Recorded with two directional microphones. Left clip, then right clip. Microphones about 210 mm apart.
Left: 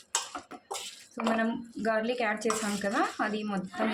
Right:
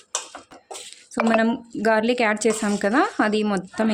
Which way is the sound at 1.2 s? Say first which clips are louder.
Right 10 dB; 45° right (ahead or behind).